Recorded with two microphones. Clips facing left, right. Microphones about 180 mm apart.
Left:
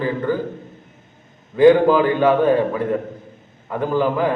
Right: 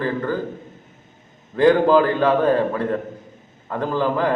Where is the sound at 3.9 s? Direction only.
15° left (ahead or behind).